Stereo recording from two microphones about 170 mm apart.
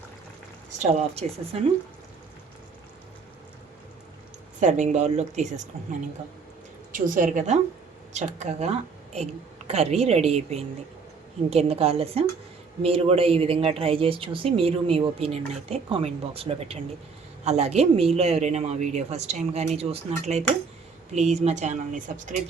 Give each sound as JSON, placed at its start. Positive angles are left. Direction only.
{"t": 0.8, "sound": "speech", "side_deg": -40}
{"t": 4.6, "sound": "speech", "side_deg": -45}
{"t": 6.9, "sound": "speech", "side_deg": -50}